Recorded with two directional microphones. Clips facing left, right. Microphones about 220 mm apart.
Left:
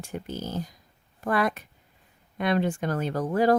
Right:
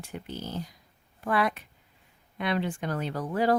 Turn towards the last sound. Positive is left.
turn(degrees=45)  # may be behind; listen again after turning